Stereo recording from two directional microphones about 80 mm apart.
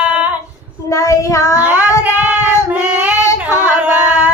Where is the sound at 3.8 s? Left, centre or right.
Centre.